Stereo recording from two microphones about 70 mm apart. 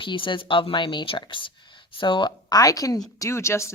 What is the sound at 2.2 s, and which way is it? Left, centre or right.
Speech, left.